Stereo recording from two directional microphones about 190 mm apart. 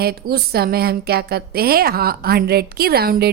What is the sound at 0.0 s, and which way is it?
A woman's voice, 55° right (ahead or behind).